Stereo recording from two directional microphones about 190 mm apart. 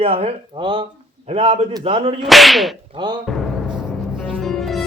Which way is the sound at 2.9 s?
20° right (ahead or behind).